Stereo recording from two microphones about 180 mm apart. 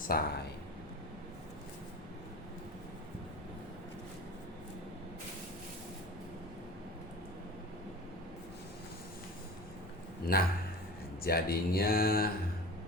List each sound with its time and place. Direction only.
0.1 s speech: 55° left (ahead or behind)
10.3 s speech: 55° left (ahead or behind)